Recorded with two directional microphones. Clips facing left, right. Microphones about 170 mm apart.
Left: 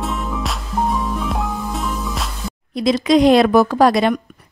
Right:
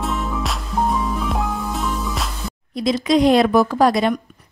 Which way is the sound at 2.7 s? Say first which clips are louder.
Left 3 dB; 80° left.